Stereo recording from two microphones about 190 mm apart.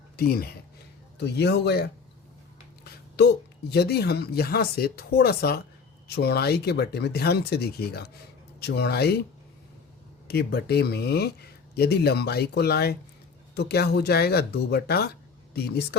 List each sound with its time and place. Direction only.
0.2 s a woman's voice: 55° left (ahead or behind)
10.2 s a woman's voice: 55° left (ahead or behind)